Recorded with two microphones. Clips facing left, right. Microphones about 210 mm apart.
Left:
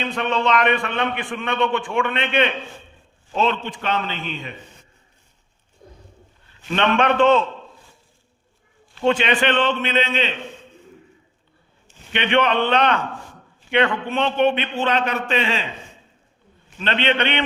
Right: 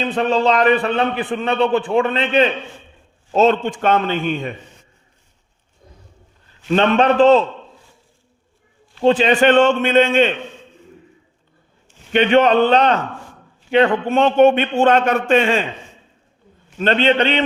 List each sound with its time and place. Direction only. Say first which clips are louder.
0.0 s a man's voice: right 5 dB; 35° right (ahead or behind)
6.7 s a man's voice: right 4 dB; 40° right (ahead or behind)
9.0 s a man's voice: right 6 dB; 35° right (ahead or behind)
12.1 s a man's voice: right 7 dB; 40° right (ahead or behind)
16.8 s a man's voice: right 6 dB; 40° right (ahead or behind)